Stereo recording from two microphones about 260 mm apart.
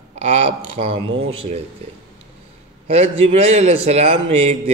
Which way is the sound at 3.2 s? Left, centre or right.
Right.